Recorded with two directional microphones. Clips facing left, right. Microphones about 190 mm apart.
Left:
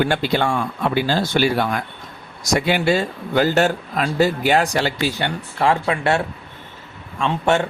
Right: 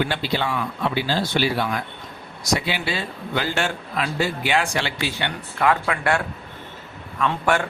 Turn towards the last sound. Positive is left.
turn(degrees=25)  # may be behind; listen again after turning